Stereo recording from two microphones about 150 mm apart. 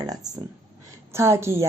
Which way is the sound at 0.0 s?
25° right (ahead or behind).